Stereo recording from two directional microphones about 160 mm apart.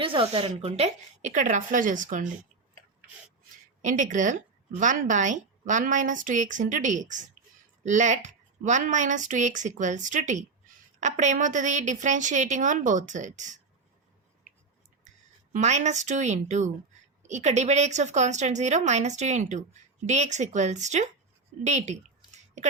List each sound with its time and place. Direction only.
0.0 s a woman's voice: 35° right (ahead or behind); by 2.2 s 55° right (ahead or behind)
3.8 s a woman's voice: 50° right (ahead or behind)
15.5 s a woman's voice: 45° right (ahead or behind)
21.6 s a sound: 45° right (ahead or behind)